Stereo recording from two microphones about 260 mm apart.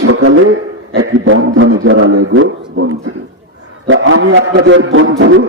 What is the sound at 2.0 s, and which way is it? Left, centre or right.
A man's voice, right.